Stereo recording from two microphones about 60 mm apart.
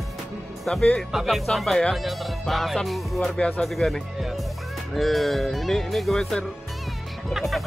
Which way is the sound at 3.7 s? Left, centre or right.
Centre.